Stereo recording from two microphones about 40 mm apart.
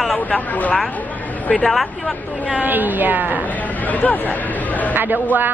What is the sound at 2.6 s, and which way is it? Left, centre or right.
Speech, right.